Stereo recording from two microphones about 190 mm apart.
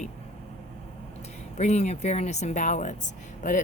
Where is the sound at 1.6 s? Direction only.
35° left (ahead or behind).